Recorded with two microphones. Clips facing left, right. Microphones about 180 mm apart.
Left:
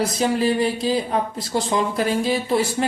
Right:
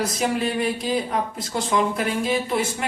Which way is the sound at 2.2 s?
35° left (ahead or behind).